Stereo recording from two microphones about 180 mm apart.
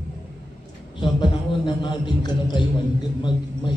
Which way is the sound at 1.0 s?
25° left (ahead or behind).